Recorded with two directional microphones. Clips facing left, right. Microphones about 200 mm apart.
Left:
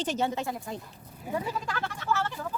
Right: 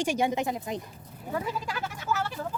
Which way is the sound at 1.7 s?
10° right (ahead or behind).